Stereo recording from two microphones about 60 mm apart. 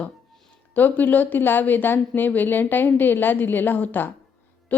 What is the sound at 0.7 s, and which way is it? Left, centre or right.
A woman's voice, left.